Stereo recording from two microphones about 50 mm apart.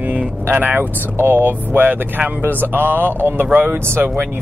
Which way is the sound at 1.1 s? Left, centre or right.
Right.